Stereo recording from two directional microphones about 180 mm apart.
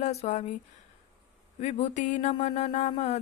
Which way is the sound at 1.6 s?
40° left (ahead or behind).